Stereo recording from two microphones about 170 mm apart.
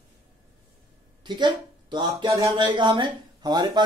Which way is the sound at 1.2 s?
25° right (ahead or behind).